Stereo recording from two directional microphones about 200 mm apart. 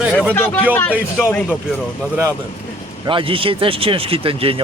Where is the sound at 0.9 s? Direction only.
5° right (ahead or behind).